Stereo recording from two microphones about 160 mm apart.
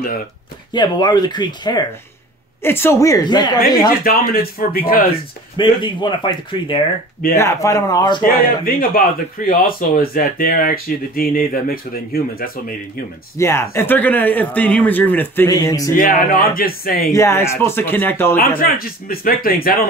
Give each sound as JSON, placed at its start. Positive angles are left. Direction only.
{"t": 0.7, "sound": "speech", "side_deg": 25}
{"t": 2.6, "sound": "speech", "side_deg": 15}
{"t": 4.0, "sound": "speech", "side_deg": 65}
{"t": 5.6, "sound": "speech", "side_deg": 30}
{"t": 7.3, "sound": "speech", "side_deg": 20}
{"t": 8.6, "sound": "speech", "side_deg": 65}
{"t": 13.4, "sound": "speech", "side_deg": 15}
{"t": 15.5, "sound": "speech", "side_deg": 20}
{"t": 16.0, "sound": "speech", "side_deg": 60}
{"t": 17.1, "sound": "speech", "side_deg": 15}
{"t": 18.6, "sound": "speech", "side_deg": 65}